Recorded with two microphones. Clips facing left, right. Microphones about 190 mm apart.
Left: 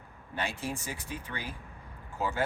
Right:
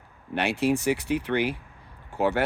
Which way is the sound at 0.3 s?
75° right (ahead or behind).